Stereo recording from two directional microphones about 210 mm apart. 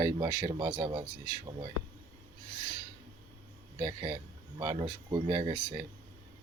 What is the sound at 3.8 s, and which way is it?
Speech, 25° right (ahead or behind).